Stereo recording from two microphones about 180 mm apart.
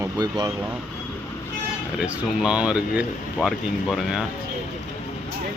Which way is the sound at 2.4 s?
5° right (ahead or behind).